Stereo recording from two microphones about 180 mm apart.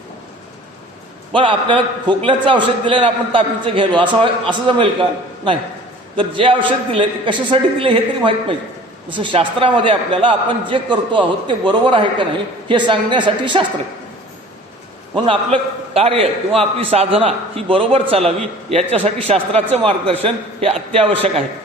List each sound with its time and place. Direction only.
1.3 s a man's voice: 30° right (ahead or behind)
6.1 s a man's voice: 30° right (ahead or behind)
15.2 s a man's voice: 30° right (ahead or behind)